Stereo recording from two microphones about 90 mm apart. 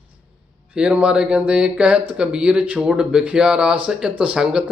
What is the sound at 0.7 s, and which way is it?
Speech, 15° right (ahead or behind).